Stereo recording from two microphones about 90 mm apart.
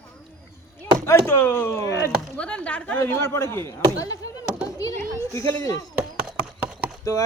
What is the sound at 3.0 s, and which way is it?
Speech, 30° left (ahead or behind).